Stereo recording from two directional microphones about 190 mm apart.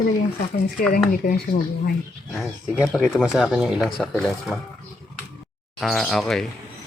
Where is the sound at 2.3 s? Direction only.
Centre (ahead or behind).